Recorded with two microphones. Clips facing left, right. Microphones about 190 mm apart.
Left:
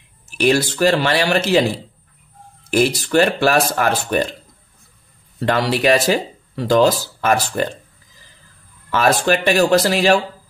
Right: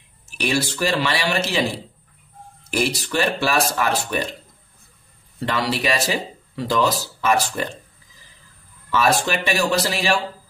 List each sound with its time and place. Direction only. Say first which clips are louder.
0.4 s speech: left 7 dB; 55° left (ahead or behind)
3.1 s speech: left 7 dB; 50° left (ahead or behind)
5.4 s speech: left 6 dB; 60° left (ahead or behind)
8.9 s speech: left 4 dB; 55° left (ahead or behind)